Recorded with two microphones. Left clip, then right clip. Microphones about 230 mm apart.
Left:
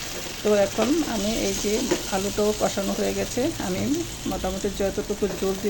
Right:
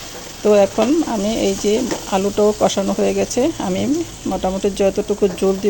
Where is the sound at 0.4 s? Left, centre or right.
Right.